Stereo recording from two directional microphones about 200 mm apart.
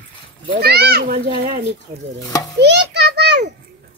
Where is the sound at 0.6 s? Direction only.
55° right (ahead or behind).